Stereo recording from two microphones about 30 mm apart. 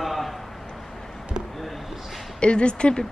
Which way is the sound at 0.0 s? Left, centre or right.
Centre.